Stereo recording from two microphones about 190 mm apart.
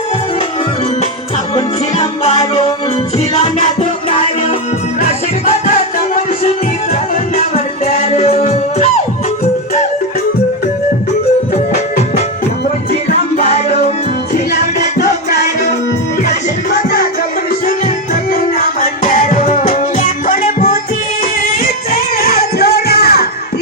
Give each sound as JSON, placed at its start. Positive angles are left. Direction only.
{"t": 1.5, "sound": "music", "side_deg": 35}
{"t": 13.1, "sound": "music", "side_deg": 35}
{"t": 14.9, "sound": "music", "side_deg": 60}
{"t": 17.7, "sound": "music", "side_deg": 50}